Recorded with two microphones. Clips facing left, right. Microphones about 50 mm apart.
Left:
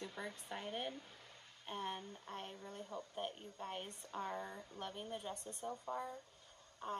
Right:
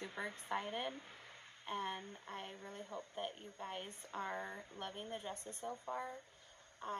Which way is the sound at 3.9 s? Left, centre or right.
Right.